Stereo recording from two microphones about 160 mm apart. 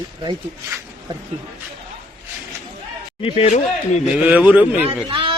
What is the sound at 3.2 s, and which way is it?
Speech, 45° left (ahead or behind).